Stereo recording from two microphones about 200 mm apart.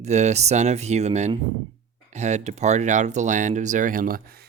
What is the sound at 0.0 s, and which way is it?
Speech, 35° right (ahead or behind).